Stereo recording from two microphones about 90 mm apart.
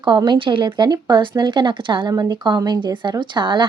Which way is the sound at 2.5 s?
50° right (ahead or behind).